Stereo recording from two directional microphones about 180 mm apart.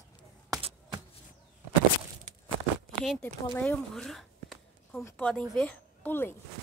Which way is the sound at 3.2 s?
5° left (ahead or behind).